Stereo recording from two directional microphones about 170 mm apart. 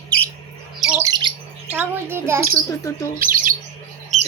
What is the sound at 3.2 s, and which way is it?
Bird, 55° right (ahead or behind).